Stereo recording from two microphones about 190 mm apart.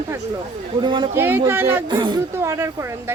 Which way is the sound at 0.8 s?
25° right (ahead or behind).